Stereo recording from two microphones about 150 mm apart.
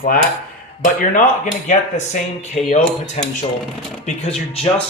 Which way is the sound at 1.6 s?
55° left (ahead or behind).